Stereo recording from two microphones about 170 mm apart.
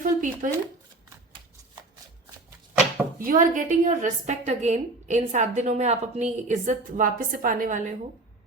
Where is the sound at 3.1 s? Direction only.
55° right (ahead or behind).